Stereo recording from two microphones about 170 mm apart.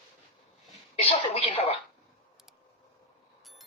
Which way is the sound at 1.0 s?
35° left (ahead or behind).